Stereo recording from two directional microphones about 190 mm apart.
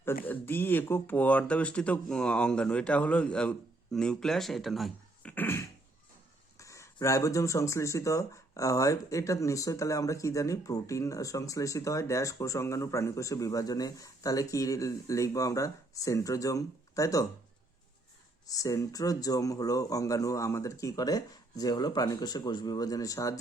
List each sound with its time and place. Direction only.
0.3 s speech: 10° left (ahead or behind)
18.4 s speech: 20° left (ahead or behind)